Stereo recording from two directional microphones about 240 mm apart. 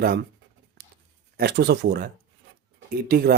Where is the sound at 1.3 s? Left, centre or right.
Right.